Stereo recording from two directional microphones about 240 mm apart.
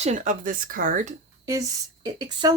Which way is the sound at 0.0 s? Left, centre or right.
Right.